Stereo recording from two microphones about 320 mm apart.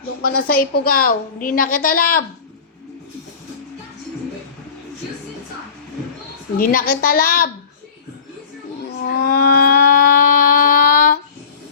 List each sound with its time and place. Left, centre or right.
0.2 s a woman's voice: left
6.6 s a woman's voice: left
9.0 s a sound: left